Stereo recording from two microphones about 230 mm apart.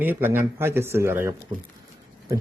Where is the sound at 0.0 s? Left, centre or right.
Centre.